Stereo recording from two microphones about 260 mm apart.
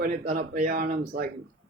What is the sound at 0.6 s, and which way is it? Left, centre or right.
Speech, right.